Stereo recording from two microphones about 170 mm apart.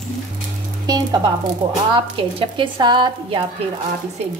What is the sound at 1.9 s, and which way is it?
A woman's voice, 30° right (ahead or behind).